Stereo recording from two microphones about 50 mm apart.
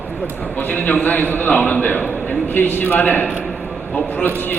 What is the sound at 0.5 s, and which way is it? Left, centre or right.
A man's voice, left.